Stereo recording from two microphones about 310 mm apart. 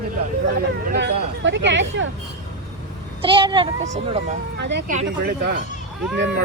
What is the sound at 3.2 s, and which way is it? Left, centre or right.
A child's voice, centre.